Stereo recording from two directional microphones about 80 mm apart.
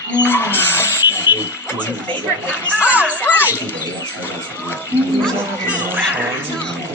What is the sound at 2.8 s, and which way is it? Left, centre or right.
Children playing, centre.